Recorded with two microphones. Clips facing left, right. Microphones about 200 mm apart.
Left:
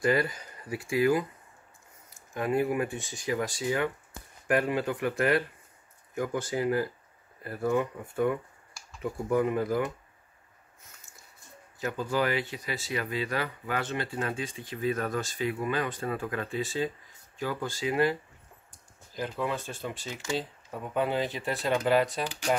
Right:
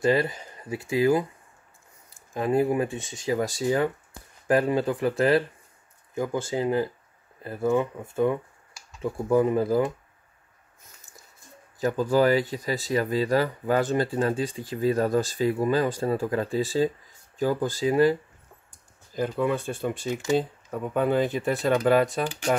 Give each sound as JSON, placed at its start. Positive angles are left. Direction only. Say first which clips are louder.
{"t": 0.0, "sound": "speech", "louder": "right 4 dB", "side_deg": -25}
{"t": 2.3, "sound": "speech", "louder": "right 4 dB", "side_deg": -30}
{"t": 11.8, "sound": "speech", "louder": "right 8 dB", "side_deg": -40}
{"t": 19.1, "sound": "speech", "louder": "right 6 dB", "side_deg": -50}